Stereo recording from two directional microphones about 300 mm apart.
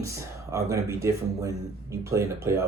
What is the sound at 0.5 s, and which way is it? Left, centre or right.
Speech, centre.